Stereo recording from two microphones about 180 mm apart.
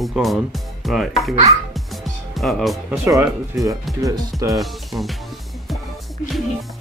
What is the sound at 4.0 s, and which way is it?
Speech, 20° right (ahead or behind).